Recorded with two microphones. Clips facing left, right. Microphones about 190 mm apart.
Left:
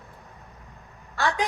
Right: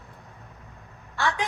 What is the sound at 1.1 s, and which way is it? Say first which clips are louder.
Speech: left 1 dB; 35° left (ahead or behind).